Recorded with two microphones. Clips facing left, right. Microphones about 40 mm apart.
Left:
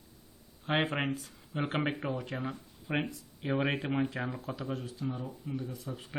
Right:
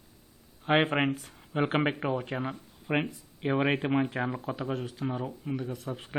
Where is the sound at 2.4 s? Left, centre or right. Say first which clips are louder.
Right 3 dB; right.